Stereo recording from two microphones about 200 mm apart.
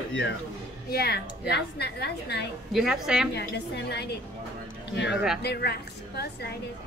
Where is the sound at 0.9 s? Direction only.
50° left (ahead or behind).